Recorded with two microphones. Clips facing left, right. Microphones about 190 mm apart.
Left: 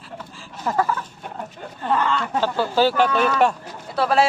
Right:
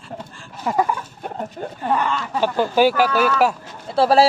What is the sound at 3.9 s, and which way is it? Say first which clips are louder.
Speech: right 4 dB; 30° right (ahead or behind).